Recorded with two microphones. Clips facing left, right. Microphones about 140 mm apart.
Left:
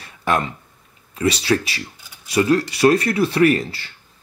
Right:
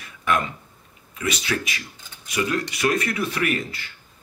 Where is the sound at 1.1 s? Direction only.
30° left (ahead or behind).